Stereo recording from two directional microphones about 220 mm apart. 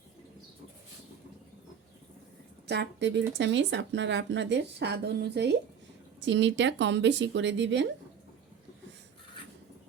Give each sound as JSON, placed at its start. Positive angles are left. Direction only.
{"t": 2.6, "sound": "speech", "side_deg": -50}